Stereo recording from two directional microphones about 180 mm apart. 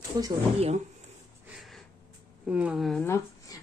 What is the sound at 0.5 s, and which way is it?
Speech, 35° right (ahead or behind).